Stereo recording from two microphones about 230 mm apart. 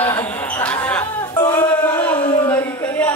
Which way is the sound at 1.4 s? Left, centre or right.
Centre.